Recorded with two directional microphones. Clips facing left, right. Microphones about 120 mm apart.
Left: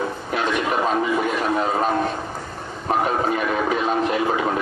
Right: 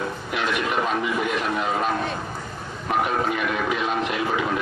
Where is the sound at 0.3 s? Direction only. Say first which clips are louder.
Left 3 dB; 35° left (ahead or behind).